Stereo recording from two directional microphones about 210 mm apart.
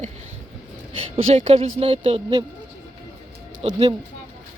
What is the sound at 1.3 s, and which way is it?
A woman's voice, 30° right (ahead or behind).